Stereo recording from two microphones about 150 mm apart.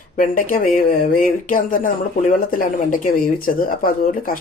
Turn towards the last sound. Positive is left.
turn(degrees=65)  # may be behind; listen again after turning